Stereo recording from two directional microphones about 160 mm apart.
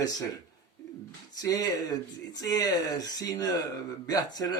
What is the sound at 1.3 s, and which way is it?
Speech, 20° left (ahead or behind).